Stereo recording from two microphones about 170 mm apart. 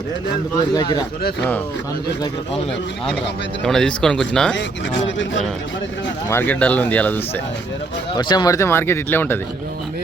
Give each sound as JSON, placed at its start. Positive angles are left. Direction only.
{"t": 0.7, "sound": "speech", "side_deg": 25}
{"t": 1.4, "sound": "speech", "side_deg": 10}
{"t": 3.6, "sound": "speech", "side_deg": 5}
{"t": 4.5, "sound": "speech", "side_deg": 90}
{"t": 6.2, "sound": "speech", "side_deg": 10}
{"t": 8.1, "sound": "speech", "side_deg": 25}